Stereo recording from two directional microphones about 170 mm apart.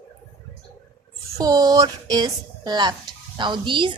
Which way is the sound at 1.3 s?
20° right (ahead or behind).